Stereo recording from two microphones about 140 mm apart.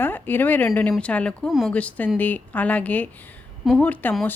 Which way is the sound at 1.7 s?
10° left (ahead or behind).